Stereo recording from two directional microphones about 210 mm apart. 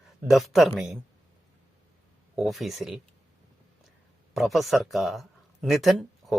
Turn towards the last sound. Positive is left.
turn(degrees=0)  # may be behind; listen again after turning